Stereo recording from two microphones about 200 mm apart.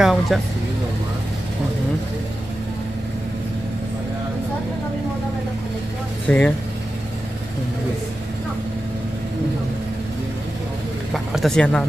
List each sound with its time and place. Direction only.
0.0 s vehicle: centre (ahead or behind)
6.2 s speech: 5° left (ahead or behind)
11.3 s speech: centre (ahead or behind)